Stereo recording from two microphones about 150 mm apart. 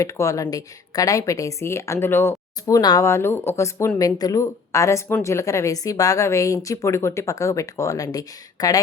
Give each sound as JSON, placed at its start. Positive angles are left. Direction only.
{"t": 0.0, "sound": "speech", "side_deg": 20}